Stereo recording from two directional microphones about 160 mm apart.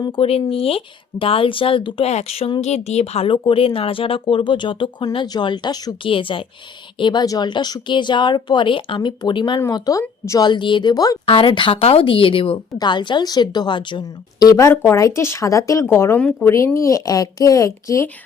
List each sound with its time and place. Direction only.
0.0 s a woman's voice: 35° left (ahead or behind); by 18.1 s 20° left (ahead or behind)